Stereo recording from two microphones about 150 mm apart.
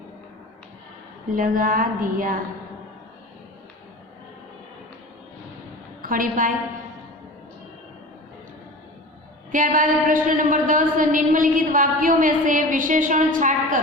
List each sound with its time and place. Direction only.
1.3 s a sound: 70° right (ahead or behind)
6.0 s a woman's voice: 65° right (ahead or behind)
9.5 s a woman's voice: 60° right (ahead or behind)